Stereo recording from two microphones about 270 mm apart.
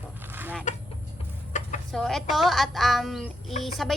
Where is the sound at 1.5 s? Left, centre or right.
Left.